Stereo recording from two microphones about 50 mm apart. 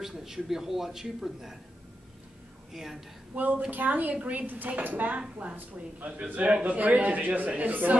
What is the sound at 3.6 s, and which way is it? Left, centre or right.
A man's voice, right.